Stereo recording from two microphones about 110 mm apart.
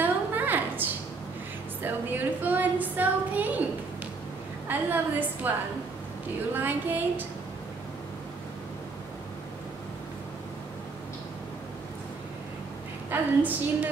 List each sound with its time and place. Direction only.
0.0 s a sound: 15° right (ahead or behind)
1.8 s a woman's voice: 15° right (ahead or behind)
4.6 s a woman's voice: 15° right (ahead or behind)
13.1 s a woman's voice: 15° right (ahead or behind)